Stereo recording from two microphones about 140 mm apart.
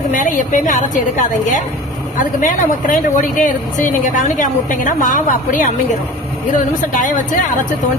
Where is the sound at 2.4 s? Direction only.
70° left (ahead or behind).